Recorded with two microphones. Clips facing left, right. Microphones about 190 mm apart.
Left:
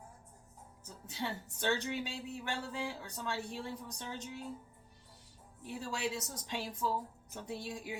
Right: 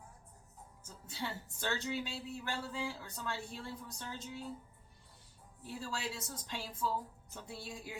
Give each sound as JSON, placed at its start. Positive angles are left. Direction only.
{"t": 0.9, "sound": "a woman's voice", "side_deg": 20}
{"t": 5.6, "sound": "a woman's voice", "side_deg": 15}